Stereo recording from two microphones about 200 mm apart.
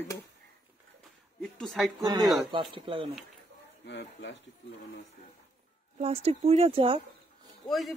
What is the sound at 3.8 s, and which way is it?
Speech, 60° left (ahead or behind).